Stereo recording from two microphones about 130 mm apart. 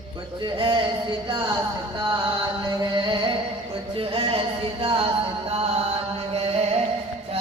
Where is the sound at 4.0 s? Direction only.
45° right (ahead or behind).